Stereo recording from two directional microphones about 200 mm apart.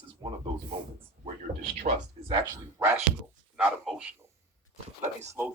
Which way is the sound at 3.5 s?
5° right (ahead or behind).